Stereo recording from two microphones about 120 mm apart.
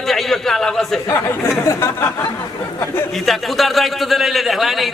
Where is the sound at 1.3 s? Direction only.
25° left (ahead or behind).